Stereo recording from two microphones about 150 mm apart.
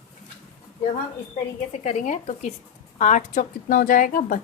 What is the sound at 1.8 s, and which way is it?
Speech, 50° left (ahead or behind).